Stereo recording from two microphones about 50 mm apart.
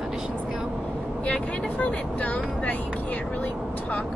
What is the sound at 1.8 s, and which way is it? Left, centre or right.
Speech, left.